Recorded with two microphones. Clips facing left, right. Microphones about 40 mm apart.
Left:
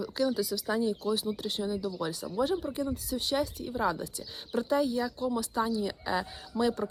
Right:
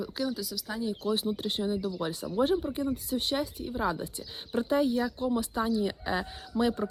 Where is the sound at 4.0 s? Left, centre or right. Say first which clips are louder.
Right 1 dB; right.